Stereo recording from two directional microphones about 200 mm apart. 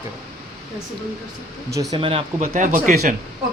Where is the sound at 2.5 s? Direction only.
40° right (ahead or behind).